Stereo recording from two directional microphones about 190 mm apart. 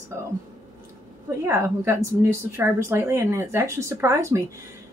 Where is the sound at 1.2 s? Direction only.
15° right (ahead or behind).